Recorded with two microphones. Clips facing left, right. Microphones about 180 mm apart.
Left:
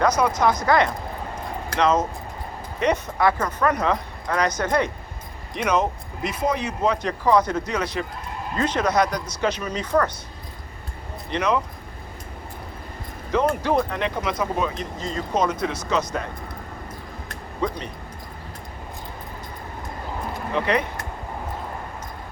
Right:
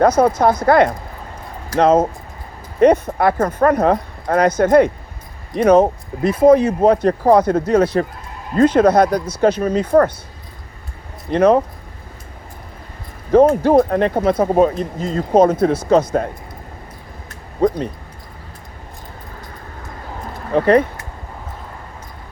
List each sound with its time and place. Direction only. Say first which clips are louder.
0.0 s speech: right 7 dB; 55° right (ahead or behind)
11.3 s speech: right 10 dB; 50° right (ahead or behind)
13.3 s speech: right 10 dB; 50° right (ahead or behind)
17.6 s speech: right 10 dB; 50° right (ahead or behind)
20.5 s speech: right 10 dB; 50° right (ahead or behind)